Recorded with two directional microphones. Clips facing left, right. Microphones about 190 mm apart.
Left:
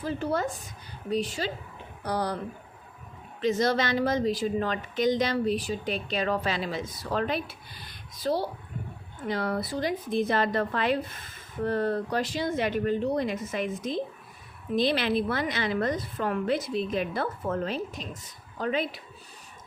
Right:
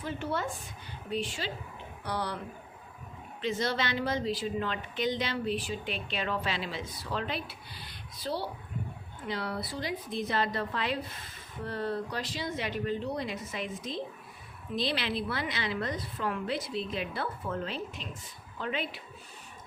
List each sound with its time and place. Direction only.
0.0 s a woman's voice: 35° left (ahead or behind)
3.4 s speech: 45° left (ahead or behind)